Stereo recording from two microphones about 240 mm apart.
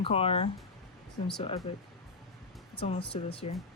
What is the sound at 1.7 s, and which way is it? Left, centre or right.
Speech, left.